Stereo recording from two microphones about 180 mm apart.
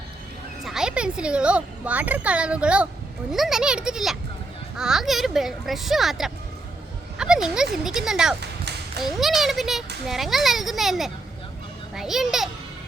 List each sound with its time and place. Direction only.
0.6 s speech: 5° right (ahead or behind)